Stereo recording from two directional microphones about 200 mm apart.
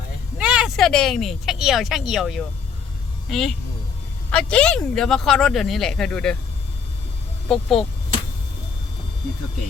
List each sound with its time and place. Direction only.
0.3 s speech: 5° right (ahead or behind)
7.4 s speech: centre (ahead or behind)